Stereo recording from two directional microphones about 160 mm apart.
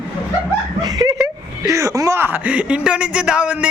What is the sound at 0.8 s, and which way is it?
Speech, 25° right (ahead or behind).